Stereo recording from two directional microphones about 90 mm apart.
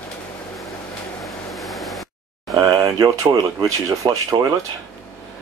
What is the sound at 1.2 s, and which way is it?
Vehicle, centre (ahead or behind).